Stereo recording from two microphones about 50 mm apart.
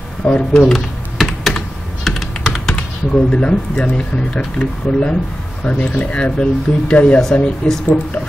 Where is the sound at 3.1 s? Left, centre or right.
Left.